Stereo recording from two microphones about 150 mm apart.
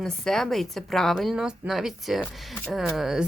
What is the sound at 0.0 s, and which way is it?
Speech, 5° left (ahead or behind).